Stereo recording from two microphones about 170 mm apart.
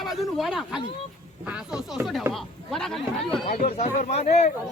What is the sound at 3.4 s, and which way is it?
Speech, 55° left (ahead or behind).